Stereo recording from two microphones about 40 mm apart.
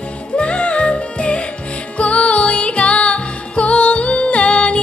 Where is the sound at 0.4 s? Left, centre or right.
Left.